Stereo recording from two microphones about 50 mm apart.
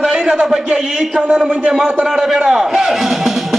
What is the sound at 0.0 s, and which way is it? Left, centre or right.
A man's voice, centre.